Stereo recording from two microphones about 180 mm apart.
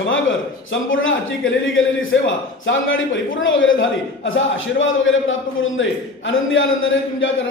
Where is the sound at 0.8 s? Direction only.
90° left.